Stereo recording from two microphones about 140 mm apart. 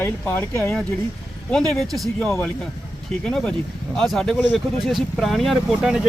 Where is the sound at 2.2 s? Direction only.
15° left (ahead or behind).